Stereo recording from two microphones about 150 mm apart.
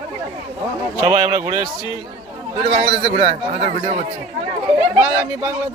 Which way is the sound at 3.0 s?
35° right (ahead or behind).